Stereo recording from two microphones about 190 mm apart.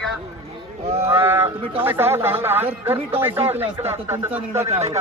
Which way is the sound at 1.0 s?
10° right (ahead or behind).